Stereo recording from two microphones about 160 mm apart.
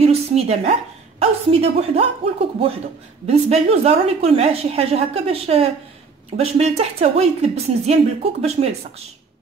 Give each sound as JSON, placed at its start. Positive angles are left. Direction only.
{"t": 0.0, "sound": "a sound", "side_deg": -40}
{"t": 1.2, "sound": "a woman's voice", "side_deg": -40}
{"t": 3.3, "sound": "a woman's voice", "side_deg": -40}